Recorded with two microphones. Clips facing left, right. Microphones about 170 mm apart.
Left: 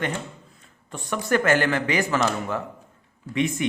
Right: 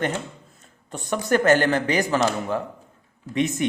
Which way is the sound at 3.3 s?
40° right (ahead or behind).